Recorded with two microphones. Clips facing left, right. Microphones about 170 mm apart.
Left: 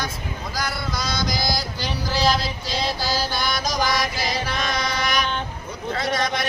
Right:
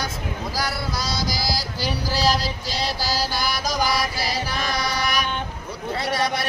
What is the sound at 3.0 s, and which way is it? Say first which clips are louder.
Mantra: even; 35° right (ahead or behind).